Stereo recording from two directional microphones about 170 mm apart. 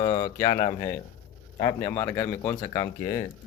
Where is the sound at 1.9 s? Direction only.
15° left (ahead or behind).